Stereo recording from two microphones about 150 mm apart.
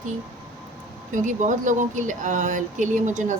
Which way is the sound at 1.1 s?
55° right (ahead or behind).